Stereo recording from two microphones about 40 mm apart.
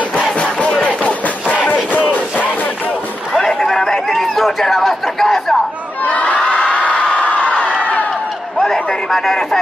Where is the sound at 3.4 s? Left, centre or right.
Centre.